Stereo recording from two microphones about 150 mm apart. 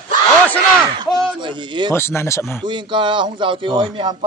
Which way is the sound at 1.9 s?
15° left (ahead or behind).